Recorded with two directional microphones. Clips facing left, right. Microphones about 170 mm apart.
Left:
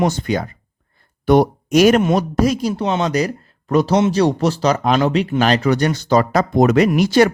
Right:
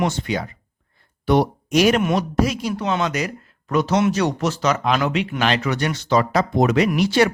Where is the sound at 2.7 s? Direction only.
30° left (ahead or behind).